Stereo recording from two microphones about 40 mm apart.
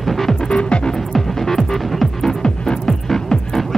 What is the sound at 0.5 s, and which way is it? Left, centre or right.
Music, left.